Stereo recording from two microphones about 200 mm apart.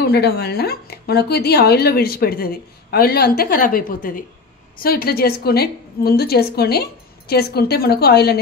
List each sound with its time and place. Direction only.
0.0 s speech: 55° left (ahead or behind)